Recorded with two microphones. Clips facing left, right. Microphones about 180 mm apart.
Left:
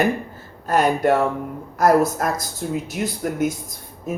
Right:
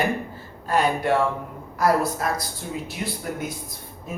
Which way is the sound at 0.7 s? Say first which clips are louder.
Left 4 dB; 45° left (ahead or behind).